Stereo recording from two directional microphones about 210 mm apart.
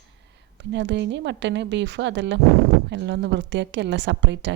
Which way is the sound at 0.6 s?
55° right (ahead or behind).